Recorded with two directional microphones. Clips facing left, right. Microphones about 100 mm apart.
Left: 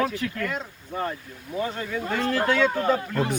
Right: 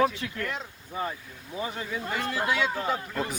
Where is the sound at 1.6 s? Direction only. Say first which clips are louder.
Left 4 dB; 10° right (ahead or behind).